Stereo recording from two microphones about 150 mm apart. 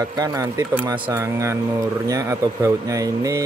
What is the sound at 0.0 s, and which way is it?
Speech, 25° right (ahead or behind).